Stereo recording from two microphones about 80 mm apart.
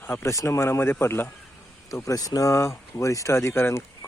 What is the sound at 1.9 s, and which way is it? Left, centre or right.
Speech, left.